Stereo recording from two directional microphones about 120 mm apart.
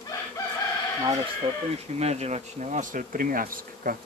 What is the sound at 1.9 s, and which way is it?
Speech, 65° right (ahead or behind).